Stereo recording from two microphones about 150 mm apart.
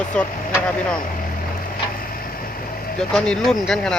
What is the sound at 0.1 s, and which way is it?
Speech, 5° left (ahead or behind).